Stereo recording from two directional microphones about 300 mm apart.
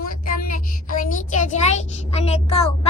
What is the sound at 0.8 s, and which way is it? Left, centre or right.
A child's voice, left.